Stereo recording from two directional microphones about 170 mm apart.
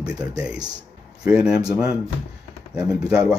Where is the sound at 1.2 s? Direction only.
5° right (ahead or behind).